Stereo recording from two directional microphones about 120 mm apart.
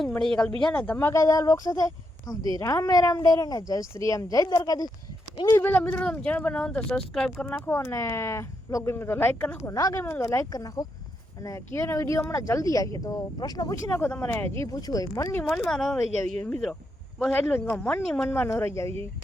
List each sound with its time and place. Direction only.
0.1 s speech: 5° left (ahead or behind); by 5.6 s 30° left (ahead or behind)
5.6 s speech: 15° left (ahead or behind)
7.6 s speech: 20° left (ahead or behind)
15.4 s speech: 5° left (ahead or behind)
17.5 s speech: 10° left (ahead or behind)
18.3 s speech: 20° left (ahead or behind)